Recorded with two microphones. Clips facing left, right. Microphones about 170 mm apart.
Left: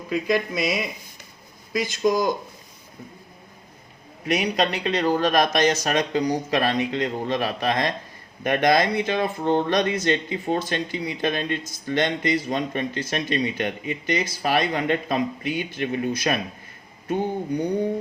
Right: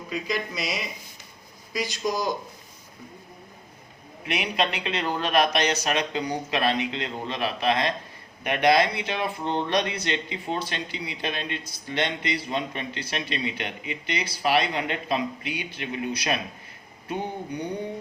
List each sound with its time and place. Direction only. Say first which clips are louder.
0.1 s speech: left 7 dB; 50° left (ahead or behind)
4.3 s speech: left 4 dB; 40° left (ahead or behind)